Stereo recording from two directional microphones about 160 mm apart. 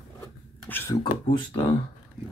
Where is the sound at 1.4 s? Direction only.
30° left (ahead or behind).